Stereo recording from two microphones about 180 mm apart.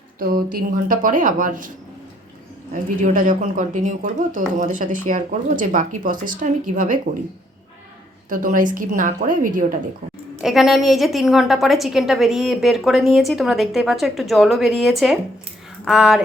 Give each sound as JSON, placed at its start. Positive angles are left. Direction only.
{"t": 0.2, "sound": "speech", "side_deg": -55}
{"t": 3.0, "sound": "speech", "side_deg": -45}
{"t": 8.3, "sound": "speech", "side_deg": -45}
{"t": 10.4, "sound": "a woman's voice", "side_deg": 0}